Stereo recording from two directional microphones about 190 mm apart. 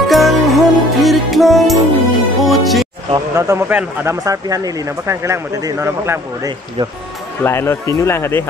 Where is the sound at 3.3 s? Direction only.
15° right (ahead or behind).